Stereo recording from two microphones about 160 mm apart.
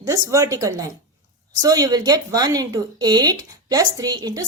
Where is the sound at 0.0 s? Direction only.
20° right (ahead or behind).